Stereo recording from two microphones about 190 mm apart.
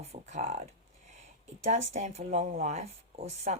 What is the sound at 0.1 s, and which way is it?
Speech, 35° right (ahead or behind).